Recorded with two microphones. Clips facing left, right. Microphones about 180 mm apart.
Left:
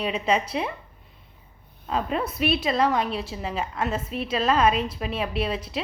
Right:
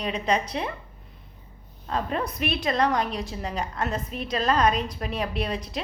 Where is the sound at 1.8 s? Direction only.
5° left (ahead or behind).